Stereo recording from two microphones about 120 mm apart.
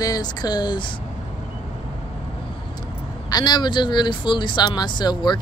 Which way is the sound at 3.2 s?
35° left (ahead or behind).